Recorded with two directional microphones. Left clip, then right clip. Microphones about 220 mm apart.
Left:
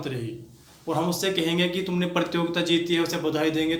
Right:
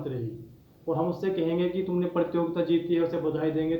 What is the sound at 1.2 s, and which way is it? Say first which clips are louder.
A man's voice: left 3 dB; 25° left (ahead or behind).